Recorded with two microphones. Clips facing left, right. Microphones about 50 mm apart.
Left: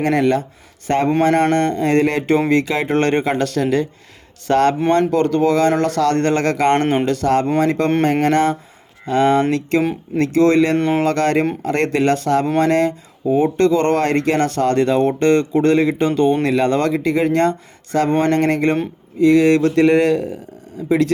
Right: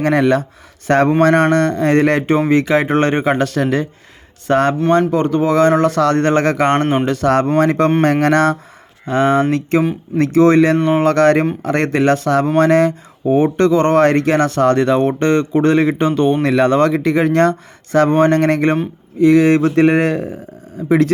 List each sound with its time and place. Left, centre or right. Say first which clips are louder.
0.2 s speech: right 2 dB; right
3.0 s speech: right 2 dB; right
9.0 s speech: right 1 dB; right
16.4 s speech: right 4 dB; right
19.5 s speech: right 1 dB; right